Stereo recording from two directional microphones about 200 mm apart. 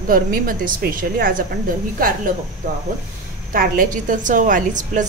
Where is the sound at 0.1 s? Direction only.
45° right (ahead or behind).